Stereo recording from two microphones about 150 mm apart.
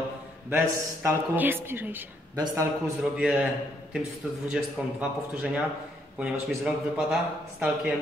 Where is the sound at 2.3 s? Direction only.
25° right (ahead or behind).